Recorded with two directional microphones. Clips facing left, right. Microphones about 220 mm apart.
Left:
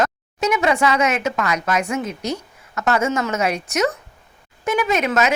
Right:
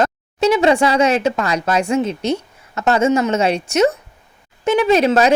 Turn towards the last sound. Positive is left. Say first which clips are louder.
# right 6 dB
turn(degrees=-30)  # may be behind; listen again after turning